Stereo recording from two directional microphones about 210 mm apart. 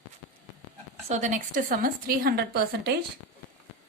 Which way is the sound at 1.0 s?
35° right (ahead or behind).